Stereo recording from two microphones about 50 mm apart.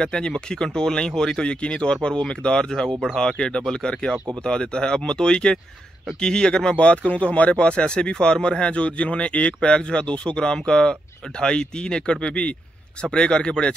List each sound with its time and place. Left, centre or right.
0.0 s speech: centre